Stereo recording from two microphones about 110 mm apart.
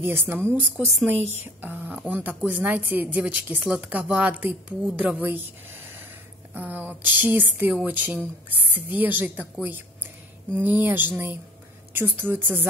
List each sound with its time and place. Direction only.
0.0 s a woman's voice: 20° right (ahead or behind)
6.5 s a woman's voice: 15° right (ahead or behind)